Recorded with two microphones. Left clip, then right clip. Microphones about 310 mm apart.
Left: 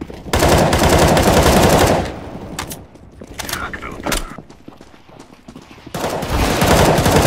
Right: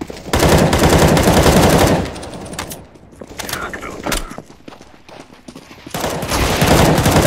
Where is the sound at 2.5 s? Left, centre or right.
Centre.